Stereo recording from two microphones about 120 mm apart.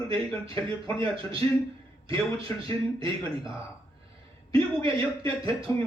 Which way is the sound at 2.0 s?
50° right (ahead or behind).